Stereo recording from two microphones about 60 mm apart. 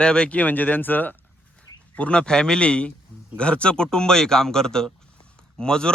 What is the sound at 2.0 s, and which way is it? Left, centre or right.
Speech, centre.